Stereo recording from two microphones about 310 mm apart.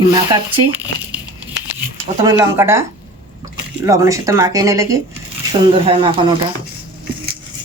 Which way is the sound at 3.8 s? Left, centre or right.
Centre.